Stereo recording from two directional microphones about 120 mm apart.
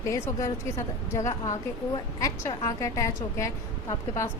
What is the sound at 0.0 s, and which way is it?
A woman's voice, 25° left (ahead or behind).